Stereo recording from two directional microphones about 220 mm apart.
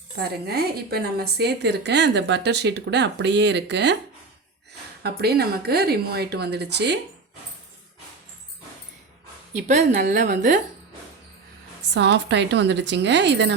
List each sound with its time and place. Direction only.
0.2 s a woman's voice: 45° right (ahead or behind)
5.0 s a woman's voice: 45° right (ahead or behind)
9.5 s a woman's voice: 30° right (ahead or behind)
11.9 s a woman's voice: 50° right (ahead or behind)